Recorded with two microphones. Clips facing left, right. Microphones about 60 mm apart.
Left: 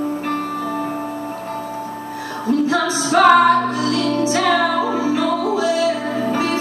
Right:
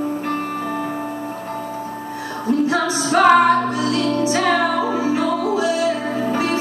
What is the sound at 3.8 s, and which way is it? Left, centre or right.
Music, right.